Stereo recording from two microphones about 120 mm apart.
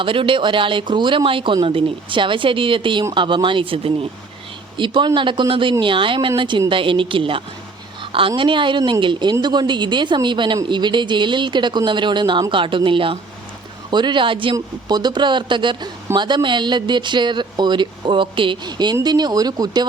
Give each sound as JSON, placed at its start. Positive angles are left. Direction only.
{"t": 0.0, "sound": "speech", "side_deg": -45}